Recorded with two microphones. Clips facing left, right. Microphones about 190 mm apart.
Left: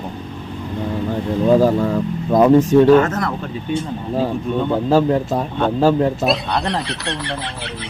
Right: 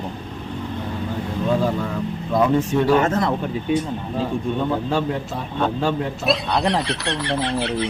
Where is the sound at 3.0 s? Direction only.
25° right (ahead or behind).